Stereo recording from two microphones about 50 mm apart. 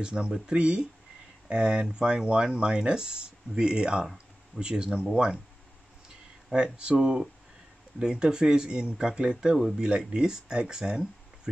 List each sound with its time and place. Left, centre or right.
0.0 s speech: centre
6.5 s speech: centre